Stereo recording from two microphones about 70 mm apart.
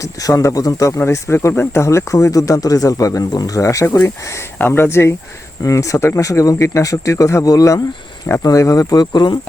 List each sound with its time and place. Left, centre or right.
0.0 s speech: left
0.9 s speech: left
3.6 s speech: left
3.8 s speech: left
5.6 s speech: left